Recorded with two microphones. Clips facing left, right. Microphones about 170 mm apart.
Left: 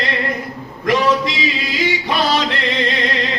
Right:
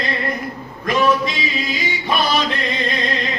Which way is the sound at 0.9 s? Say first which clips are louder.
Left 1 dB; 90° left.